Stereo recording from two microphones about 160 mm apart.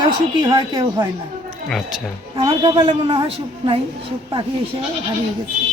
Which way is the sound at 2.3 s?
30° right (ahead or behind).